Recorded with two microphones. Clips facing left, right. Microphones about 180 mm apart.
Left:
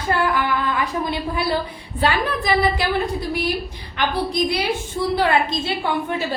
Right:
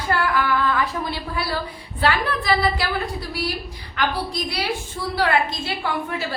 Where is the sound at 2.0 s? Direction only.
20° left (ahead or behind).